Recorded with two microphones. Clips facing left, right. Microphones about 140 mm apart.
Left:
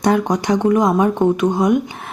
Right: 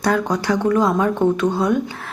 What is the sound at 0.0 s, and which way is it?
Speech, 20° left (ahead or behind).